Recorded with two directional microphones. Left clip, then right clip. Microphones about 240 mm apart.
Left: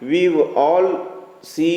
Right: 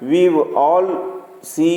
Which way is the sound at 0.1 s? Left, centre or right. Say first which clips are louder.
Right 2 dB; right.